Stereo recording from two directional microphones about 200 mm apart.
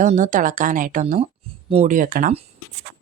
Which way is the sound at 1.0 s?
30° right (ahead or behind).